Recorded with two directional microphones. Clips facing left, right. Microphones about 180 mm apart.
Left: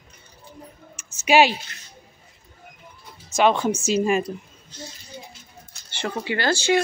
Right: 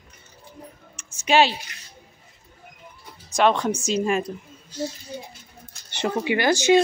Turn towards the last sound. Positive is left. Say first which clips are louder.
# right 3 dB
turn(degrees=-20)  # may be behind; listen again after turning